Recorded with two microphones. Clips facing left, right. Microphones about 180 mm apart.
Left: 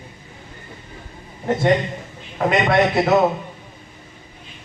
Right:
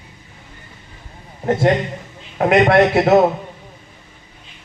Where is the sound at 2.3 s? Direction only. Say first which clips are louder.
Right 5 dB; 55° right (ahead or behind).